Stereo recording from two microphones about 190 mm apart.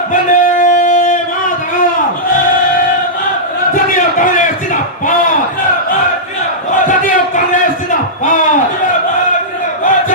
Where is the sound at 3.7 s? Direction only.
45° left (ahead or behind).